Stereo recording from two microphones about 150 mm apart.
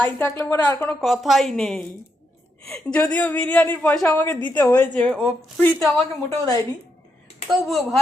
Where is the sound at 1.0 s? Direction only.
Centre (ahead or behind).